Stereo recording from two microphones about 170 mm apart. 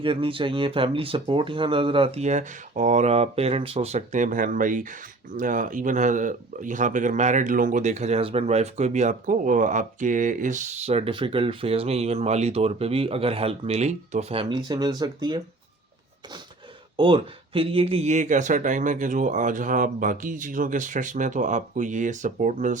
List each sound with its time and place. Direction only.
0.0 s speech: 30° right (ahead or behind)
14.5 s speech: 25° right (ahead or behind)
17.0 s speech: 30° right (ahead or behind); by 22.8 s 50° right (ahead or behind)